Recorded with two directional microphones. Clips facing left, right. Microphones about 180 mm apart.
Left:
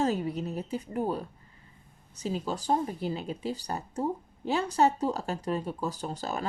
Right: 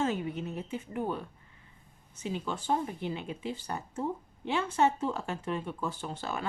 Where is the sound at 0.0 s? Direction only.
35° left (ahead or behind).